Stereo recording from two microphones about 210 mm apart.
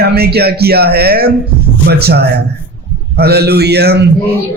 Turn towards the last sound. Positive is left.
turn(degrees=-50)  # may be behind; listen again after turning